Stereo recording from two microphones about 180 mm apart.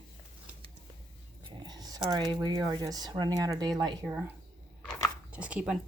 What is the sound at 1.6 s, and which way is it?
Speech, 20° right (ahead or behind).